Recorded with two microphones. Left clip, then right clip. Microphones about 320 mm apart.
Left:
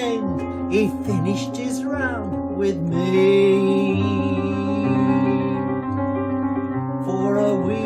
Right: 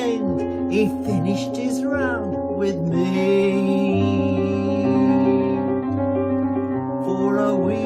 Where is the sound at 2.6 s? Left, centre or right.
Centre.